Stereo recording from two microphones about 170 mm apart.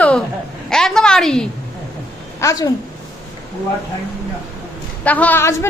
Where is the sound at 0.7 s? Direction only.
5° left (ahead or behind).